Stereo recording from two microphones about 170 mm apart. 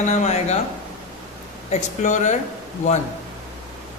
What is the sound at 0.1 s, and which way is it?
Speech, 40° left (ahead or behind).